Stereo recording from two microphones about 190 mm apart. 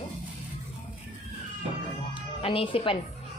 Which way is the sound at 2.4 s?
30° left (ahead or behind).